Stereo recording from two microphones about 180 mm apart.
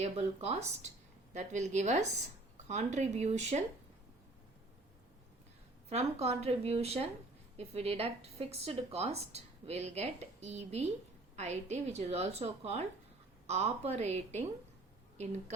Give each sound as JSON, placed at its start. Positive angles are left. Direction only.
{"t": 0.0, "sound": "speech", "side_deg": -35}
{"t": 5.9, "sound": "speech", "side_deg": -35}